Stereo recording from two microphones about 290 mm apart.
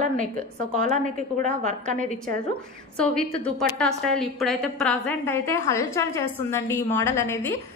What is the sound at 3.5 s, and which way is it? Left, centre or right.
A woman's voice, centre.